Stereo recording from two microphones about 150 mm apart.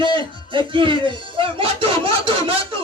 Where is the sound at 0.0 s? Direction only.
35° right (ahead or behind).